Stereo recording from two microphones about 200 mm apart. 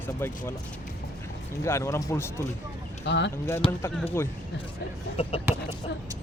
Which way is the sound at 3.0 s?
60° left (ahead or behind).